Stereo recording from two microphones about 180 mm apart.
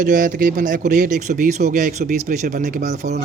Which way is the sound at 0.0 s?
50° right (ahead or behind).